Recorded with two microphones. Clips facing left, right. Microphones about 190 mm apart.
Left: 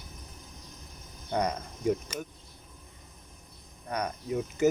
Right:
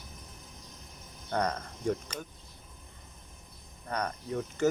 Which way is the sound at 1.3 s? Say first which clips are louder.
Left 1 dB; 15° left (ahead or behind).